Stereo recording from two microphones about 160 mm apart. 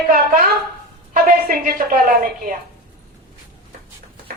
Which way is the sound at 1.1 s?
65° right (ahead or behind).